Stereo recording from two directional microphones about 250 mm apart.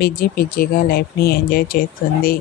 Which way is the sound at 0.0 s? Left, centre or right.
Left.